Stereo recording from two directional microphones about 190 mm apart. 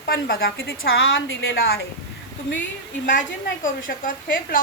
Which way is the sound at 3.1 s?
45° left (ahead or behind).